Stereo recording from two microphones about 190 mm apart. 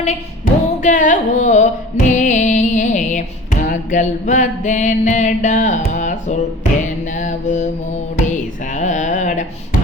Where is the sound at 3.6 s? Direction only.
40° left (ahead or behind).